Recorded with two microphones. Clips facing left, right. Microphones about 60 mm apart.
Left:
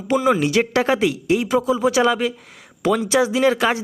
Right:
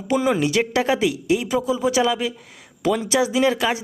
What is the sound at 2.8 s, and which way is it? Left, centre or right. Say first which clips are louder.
Speech: left 2 dB; centre.